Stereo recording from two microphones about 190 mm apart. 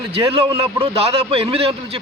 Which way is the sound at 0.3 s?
30° right (ahead or behind).